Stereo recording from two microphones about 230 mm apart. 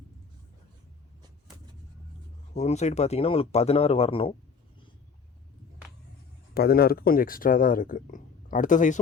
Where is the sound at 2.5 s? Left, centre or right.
Left.